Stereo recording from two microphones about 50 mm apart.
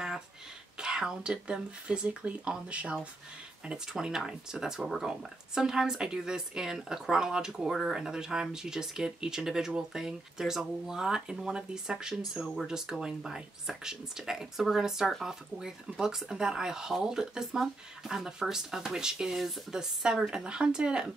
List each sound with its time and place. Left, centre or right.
0.7 s speech: centre
2.0 s speech: right
3.7 s speech: centre